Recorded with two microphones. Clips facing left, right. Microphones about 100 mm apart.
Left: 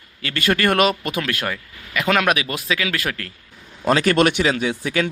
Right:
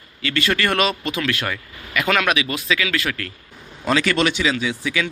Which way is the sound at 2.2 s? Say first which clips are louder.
Left 1 dB; 45° left (ahead or behind).